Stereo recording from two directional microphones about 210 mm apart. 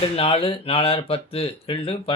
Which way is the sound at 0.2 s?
25° left (ahead or behind).